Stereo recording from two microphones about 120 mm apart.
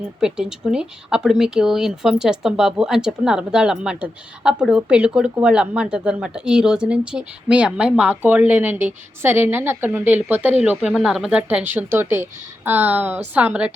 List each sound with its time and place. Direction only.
0.2 s speech: 5° right (ahead or behind)